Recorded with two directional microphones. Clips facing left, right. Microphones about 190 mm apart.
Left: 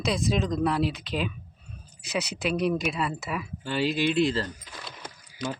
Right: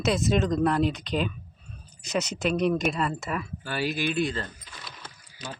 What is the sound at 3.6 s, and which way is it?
Speech, 25° left (ahead or behind).